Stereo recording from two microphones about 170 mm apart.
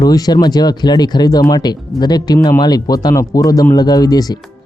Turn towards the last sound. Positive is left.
turn(degrees=20)  # may be behind; listen again after turning